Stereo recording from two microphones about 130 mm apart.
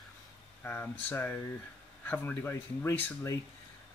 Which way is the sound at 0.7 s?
15° left (ahead or behind).